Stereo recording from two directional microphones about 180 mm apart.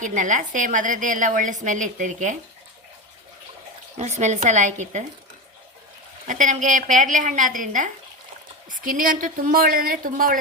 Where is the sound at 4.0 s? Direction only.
40° right (ahead or behind).